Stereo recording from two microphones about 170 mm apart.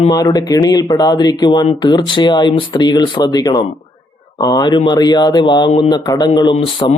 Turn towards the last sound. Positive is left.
turn(degrees=35)  # may be behind; listen again after turning